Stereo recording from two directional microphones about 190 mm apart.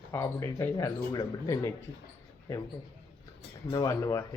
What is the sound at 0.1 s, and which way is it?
Speech, 15° left (ahead or behind).